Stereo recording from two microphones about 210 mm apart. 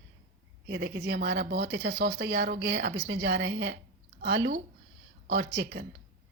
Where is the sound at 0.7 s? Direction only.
55° right (ahead or behind).